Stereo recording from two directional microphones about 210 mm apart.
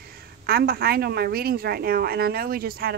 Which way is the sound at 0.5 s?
45° right (ahead or behind).